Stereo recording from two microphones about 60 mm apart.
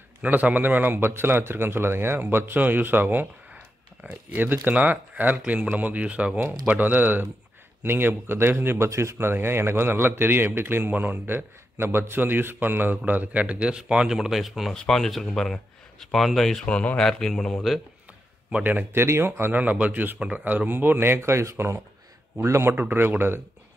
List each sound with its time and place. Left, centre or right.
0.2 s a man's voice: right
4.0 s speech: right
4.4 s a man's voice: right; by 16.6 s centre
16.6 s speech: centre
18.6 s speech: right
18.9 s a man's voice: right
19.6 s a man's voice: right
22.8 s a man's voice: right